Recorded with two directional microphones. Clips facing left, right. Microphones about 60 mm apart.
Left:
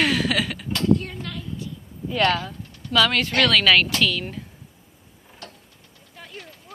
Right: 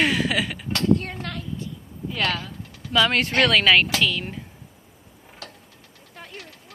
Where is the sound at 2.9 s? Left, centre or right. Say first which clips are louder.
Left 1 dB; centre.